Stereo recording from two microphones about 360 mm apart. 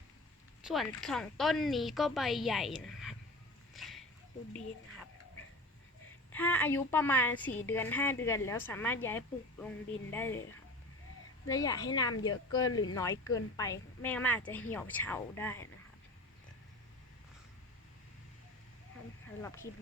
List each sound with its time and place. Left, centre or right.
0.6 s speech: centre
3.8 s a sound: centre
6.3 s speech: centre
11.4 s a woman's voice: centre
12.1 s speech: left
12.5 s a woman's voice: centre
19.4 s a woman's voice: centre